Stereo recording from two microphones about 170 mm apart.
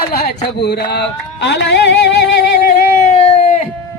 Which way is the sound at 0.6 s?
80° left.